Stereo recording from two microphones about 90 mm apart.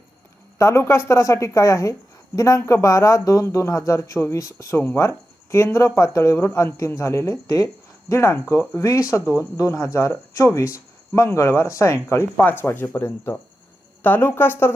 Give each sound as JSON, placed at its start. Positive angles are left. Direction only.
{"t": 0.6, "sound": "a woman's voice", "side_deg": 30}
{"t": 8.1, "sound": "a woman's voice", "side_deg": 30}